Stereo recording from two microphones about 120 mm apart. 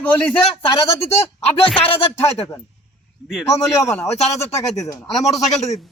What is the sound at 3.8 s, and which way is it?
Speech, 20° left (ahead or behind).